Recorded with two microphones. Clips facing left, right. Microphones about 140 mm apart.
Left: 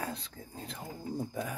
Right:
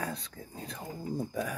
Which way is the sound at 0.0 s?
25° left (ahead or behind).